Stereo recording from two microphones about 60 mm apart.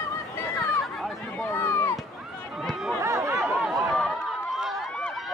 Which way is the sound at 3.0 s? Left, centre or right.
Right.